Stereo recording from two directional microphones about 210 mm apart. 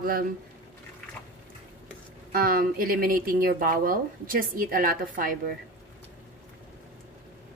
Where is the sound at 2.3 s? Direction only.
45° right (ahead or behind).